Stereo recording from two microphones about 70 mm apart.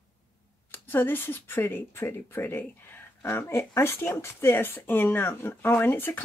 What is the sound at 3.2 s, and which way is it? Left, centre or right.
Speech, left.